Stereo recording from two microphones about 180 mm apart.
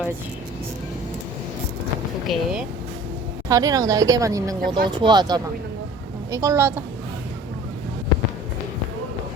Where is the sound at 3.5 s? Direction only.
20° right (ahead or behind).